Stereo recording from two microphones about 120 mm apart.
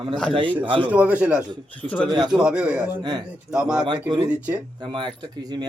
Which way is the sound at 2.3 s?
5° right (ahead or behind).